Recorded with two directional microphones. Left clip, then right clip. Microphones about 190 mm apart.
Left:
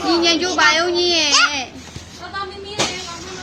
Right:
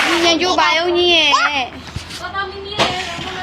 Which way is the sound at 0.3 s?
15° left (ahead or behind).